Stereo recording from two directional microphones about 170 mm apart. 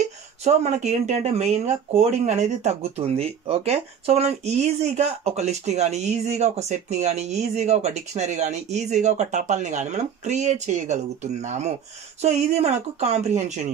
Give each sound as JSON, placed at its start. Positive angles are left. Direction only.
{"t": 0.0, "sound": "speech", "side_deg": -40}